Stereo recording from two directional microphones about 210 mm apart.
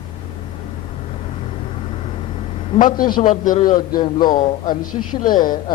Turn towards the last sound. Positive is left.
turn(degrees=20)  # may be behind; listen again after turning